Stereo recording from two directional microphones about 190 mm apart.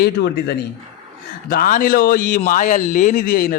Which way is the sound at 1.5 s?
45° left (ahead or behind).